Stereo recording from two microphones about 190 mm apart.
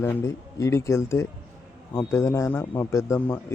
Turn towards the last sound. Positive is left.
turn(degrees=15)  # may be behind; listen again after turning